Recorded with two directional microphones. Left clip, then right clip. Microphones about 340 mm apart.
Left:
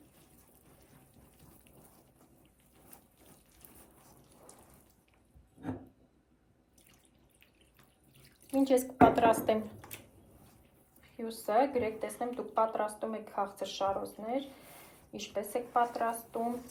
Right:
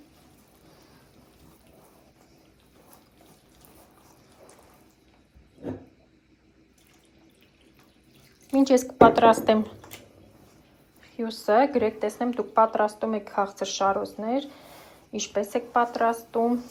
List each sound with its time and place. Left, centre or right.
8.4 s a woman's voice: right
11.2 s a woman's voice: right